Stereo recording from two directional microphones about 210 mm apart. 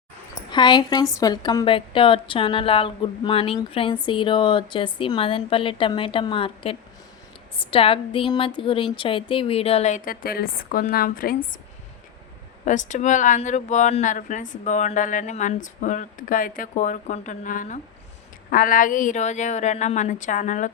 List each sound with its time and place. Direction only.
0.5 s speech: 20° left (ahead or behind); by 11.3 s 40° left (ahead or behind)
12.6 s speech: 35° left (ahead or behind)